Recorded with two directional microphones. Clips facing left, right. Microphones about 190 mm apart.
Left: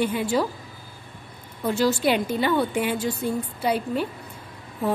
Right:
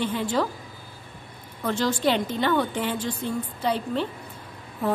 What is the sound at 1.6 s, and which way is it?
A woman's voice, 10° left (ahead or behind).